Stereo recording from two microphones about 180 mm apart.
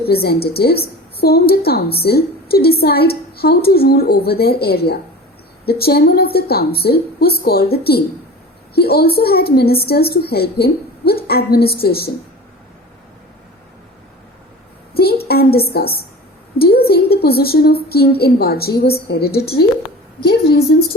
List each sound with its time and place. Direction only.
0.1 s a woman's voice: 60° left (ahead or behind)
15.3 s a woman's voice: 60° left (ahead or behind)